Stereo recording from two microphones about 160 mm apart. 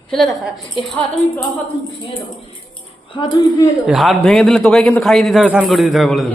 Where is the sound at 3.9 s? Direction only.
Centre (ahead or behind).